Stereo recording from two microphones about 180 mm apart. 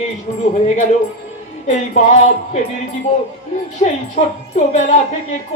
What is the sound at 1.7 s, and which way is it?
Speech, 40° left (ahead or behind).